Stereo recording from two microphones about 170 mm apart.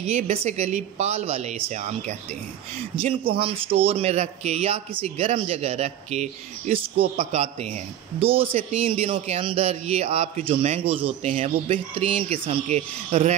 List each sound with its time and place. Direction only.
0.0 s speech: 35° right (ahead or behind)
3.1 s speech: 35° right (ahead or behind)